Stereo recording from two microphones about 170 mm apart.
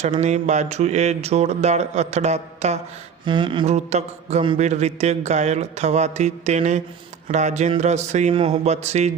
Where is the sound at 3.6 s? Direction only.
40° right (ahead or behind).